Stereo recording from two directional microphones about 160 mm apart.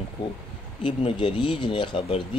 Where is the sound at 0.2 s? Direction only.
30° left (ahead or behind).